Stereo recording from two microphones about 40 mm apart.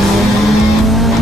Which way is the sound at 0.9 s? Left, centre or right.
Centre.